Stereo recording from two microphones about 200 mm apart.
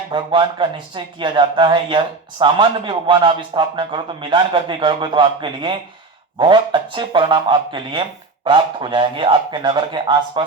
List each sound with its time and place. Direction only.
0.1 s speech: 25° right (ahead or behind)